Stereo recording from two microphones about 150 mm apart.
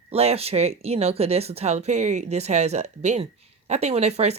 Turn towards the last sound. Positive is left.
turn(degrees=-45)  # may be behind; listen again after turning